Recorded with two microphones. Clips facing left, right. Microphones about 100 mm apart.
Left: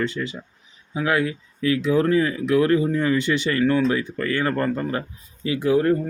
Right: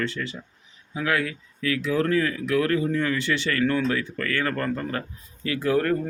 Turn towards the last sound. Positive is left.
turn(degrees=20)  # may be behind; listen again after turning